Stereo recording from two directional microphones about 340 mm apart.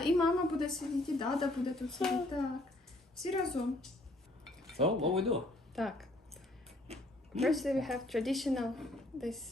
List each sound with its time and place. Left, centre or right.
0.0 s a woman's voice: centre
4.9 s speech: centre
6.8 s a sound: centre
7.4 s a woman's voice: centre